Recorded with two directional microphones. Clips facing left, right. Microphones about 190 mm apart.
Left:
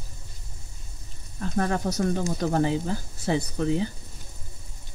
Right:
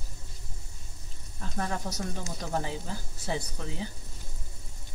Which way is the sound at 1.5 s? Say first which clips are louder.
Left 8 dB; 80° left.